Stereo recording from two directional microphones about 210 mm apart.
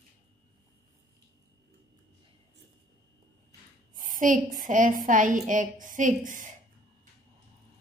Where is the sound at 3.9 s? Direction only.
40° right (ahead or behind).